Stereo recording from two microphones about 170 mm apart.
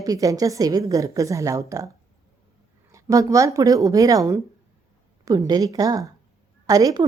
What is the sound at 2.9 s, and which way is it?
A woman's voice, 20° right (ahead or behind).